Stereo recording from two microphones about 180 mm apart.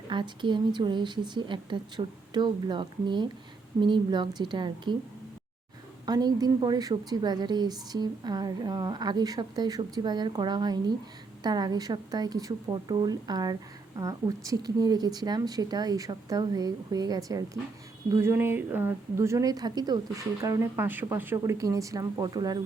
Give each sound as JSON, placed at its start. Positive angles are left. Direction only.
{"t": 0.1, "sound": "a woman's voice", "side_deg": -25}
{"t": 6.1, "sound": "a woman's voice", "side_deg": -20}